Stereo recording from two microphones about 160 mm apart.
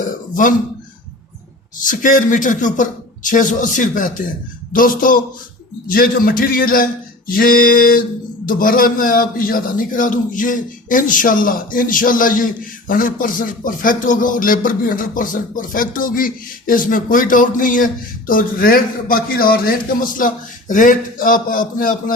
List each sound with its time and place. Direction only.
0.0 s throat clearing: 55° left (ahead or behind)
1.8 s speech: 55° left (ahead or behind)